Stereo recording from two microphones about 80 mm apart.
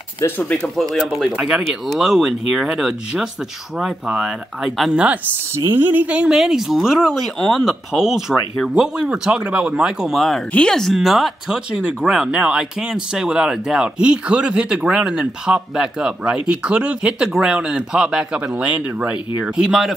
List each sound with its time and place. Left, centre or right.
0.4 s speech: centre
0.7 s speech: centre
5.5 s speech: right; by 6.3 s centre
6.3 s speech: centre